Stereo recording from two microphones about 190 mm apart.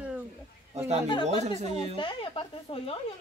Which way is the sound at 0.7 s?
35° right (ahead or behind).